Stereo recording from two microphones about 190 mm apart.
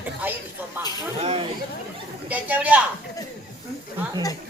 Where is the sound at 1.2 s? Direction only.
30° right (ahead or behind).